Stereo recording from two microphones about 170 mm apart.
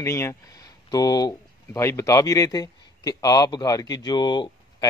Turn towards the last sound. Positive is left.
turn(degrees=25)  # may be behind; listen again after turning